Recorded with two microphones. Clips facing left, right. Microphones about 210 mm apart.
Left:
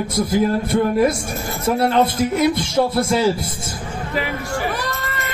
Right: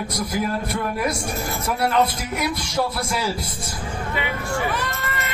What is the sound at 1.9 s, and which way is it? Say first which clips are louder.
Speech: left 1 dB; 30° left (ahead or behind).